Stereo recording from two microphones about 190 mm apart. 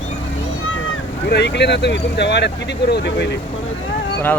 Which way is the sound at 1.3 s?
60° left (ahead or behind).